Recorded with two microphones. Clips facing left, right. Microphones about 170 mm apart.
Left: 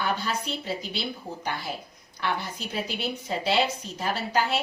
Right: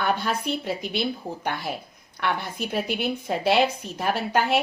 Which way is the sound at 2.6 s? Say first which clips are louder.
Right 5 dB; 60° right (ahead or behind).